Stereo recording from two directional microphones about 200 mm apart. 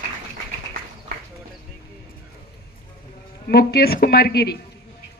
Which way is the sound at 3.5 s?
50° left (ahead or behind).